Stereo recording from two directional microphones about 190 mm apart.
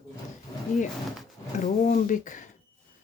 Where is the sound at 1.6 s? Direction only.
40° left (ahead or behind).